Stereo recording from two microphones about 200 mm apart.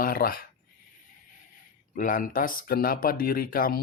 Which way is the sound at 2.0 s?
40° left (ahead or behind).